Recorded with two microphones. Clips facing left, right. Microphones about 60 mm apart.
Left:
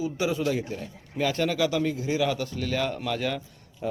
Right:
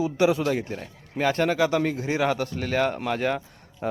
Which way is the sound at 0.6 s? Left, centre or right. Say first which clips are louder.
Right 1 dB; right.